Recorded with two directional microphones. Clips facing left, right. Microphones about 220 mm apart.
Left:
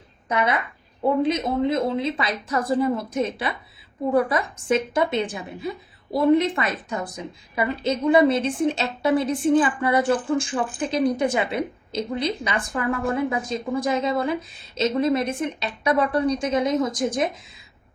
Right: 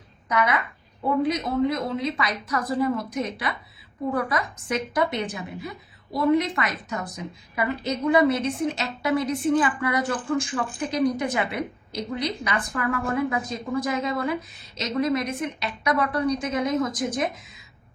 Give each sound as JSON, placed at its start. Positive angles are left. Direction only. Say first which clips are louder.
{"t": 0.3, "sound": "a woman's voice", "louder": "left 1 dB", "side_deg": 25}